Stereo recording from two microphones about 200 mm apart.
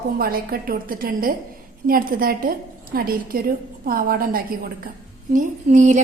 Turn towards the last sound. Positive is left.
turn(degrees=-35)  # may be behind; listen again after turning